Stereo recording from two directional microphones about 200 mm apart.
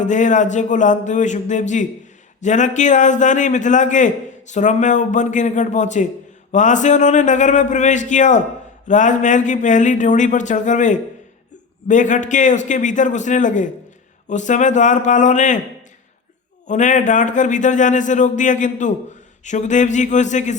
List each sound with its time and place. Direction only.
0.0 s a man's voice: 40° left (ahead or behind)
16.6 s a man's voice: 40° left (ahead or behind)